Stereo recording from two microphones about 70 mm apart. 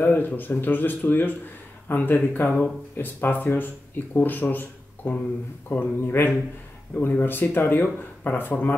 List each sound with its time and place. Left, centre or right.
0.0 s speech: left